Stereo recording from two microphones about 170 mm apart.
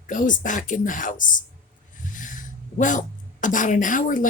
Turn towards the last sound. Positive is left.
turn(degrees=50)  # may be behind; listen again after turning